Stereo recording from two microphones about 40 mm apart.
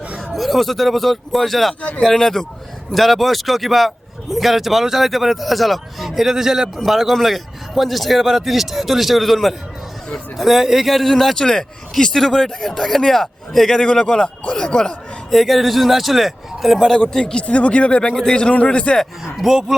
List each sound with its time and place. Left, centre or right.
0.3 s a man's voice: centre
2.9 s a man's voice: centre
11.3 s speech: centre
13.8 s a man's voice: left
15.3 s a man's voice: centre
17.0 s speech: centre
17.4 s a man's voice: left
18.1 s speech: centre
18.3 s a man's voice: left
19.2 s speech: centre